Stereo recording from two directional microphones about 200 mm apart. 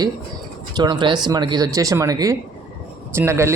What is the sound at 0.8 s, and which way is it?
Speech, 20° right (ahead or behind).